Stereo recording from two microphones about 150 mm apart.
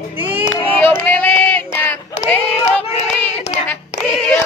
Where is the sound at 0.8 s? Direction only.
10° left (ahead or behind).